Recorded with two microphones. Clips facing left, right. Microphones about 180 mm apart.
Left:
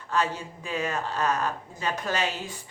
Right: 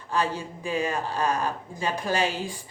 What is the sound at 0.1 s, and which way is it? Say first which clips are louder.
Speech: right 1 dB; 10° right (ahead or behind).